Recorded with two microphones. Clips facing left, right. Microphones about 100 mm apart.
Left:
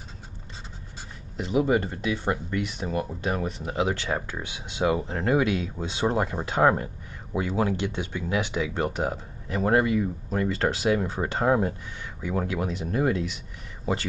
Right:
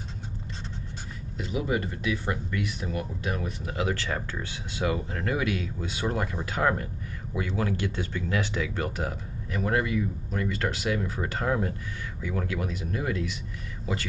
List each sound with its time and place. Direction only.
1.4 s speech: 30° left (ahead or behind)
3.6 s speech: 20° left (ahead or behind)